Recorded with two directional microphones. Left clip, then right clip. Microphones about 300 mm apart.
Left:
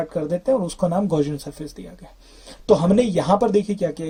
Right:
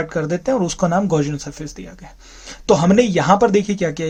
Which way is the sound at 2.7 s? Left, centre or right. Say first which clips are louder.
Right 3 dB; centre.